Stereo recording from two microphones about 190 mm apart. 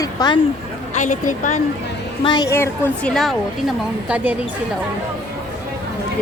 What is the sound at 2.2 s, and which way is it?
Speech, 20° left (ahead or behind).